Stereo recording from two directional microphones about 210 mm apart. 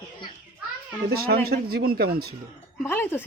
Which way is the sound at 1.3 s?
50° right (ahead or behind).